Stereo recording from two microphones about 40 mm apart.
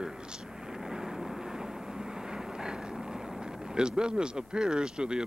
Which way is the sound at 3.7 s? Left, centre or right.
Right.